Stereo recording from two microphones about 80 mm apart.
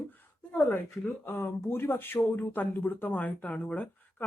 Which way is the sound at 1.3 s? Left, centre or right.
Left.